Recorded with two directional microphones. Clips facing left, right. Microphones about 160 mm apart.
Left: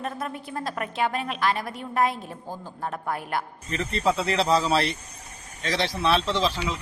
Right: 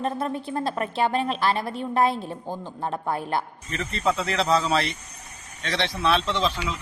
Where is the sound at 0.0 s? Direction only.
30° right (ahead or behind).